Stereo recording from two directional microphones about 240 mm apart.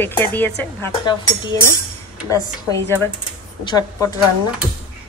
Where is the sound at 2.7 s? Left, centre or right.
Centre.